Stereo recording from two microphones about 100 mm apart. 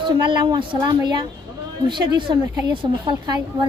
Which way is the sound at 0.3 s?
50° right (ahead or behind).